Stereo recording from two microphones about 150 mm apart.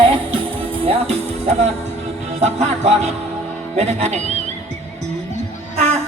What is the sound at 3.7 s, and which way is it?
Speech, 50° right (ahead or behind).